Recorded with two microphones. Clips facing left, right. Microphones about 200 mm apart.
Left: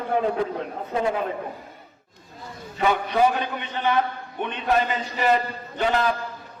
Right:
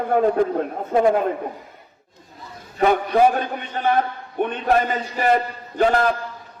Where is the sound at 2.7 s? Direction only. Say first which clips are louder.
Right 4 dB; 45° right (ahead or behind).